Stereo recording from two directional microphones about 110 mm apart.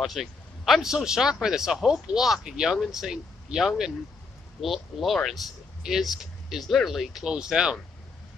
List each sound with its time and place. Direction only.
0.0 s speech: centre (ahead or behind)